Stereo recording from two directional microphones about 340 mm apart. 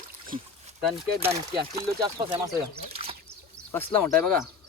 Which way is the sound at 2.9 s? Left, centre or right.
Centre.